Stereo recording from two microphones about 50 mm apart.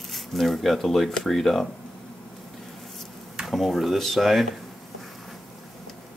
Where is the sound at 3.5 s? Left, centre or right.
Centre.